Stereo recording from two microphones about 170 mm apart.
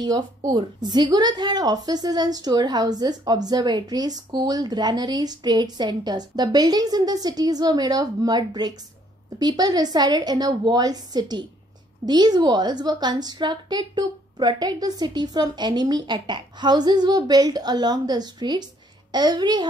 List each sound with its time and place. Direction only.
0.0 s a woman's voice: 25° right (ahead or behind)